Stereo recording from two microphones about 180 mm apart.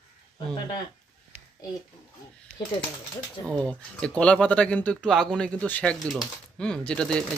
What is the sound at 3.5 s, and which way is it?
Speech, 5° left (ahead or behind).